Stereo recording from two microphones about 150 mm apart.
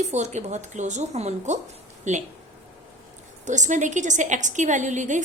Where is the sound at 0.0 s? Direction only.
50° right (ahead or behind).